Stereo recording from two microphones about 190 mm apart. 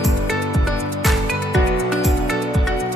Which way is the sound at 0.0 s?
Centre (ahead or behind).